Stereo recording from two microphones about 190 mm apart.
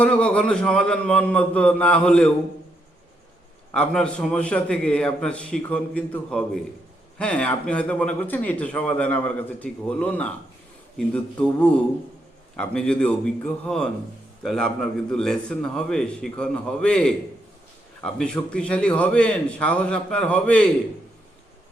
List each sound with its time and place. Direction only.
0.0 s a man's voice: 5° left (ahead or behind)
3.7 s a man's voice: 5° left (ahead or behind)